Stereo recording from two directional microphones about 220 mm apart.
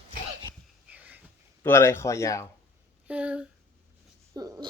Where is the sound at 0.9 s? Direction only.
5° right (ahead or behind).